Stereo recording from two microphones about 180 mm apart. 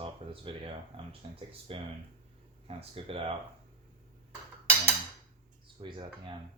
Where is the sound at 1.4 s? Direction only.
30° right (ahead or behind).